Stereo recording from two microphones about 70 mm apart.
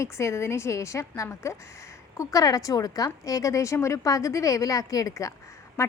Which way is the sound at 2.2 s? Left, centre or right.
Left.